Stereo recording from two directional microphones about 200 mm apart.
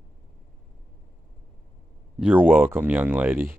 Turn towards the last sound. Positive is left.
turn(degrees=-10)  # may be behind; listen again after turning